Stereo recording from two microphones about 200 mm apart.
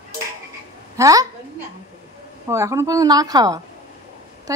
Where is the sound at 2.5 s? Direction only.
15° right (ahead or behind).